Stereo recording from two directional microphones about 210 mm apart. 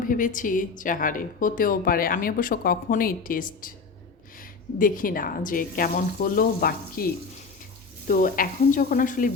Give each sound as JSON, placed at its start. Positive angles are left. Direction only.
{"t": 0.1, "sound": "speech", "side_deg": 40}
{"t": 4.8, "sound": "speech", "side_deg": 40}